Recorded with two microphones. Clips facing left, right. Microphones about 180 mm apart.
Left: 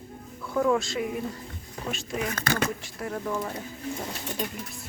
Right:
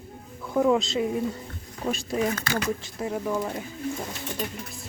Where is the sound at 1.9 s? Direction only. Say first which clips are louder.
Right 5 dB; 35° right (ahead or behind).